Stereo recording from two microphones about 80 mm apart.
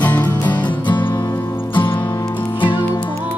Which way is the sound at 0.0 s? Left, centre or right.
Left.